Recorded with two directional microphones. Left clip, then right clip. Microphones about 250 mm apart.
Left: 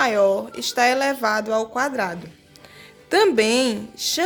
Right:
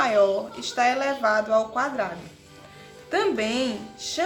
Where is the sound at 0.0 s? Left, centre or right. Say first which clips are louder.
Left 2 dB; left.